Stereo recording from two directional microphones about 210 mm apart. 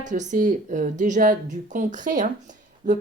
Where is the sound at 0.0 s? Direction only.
35° right (ahead or behind).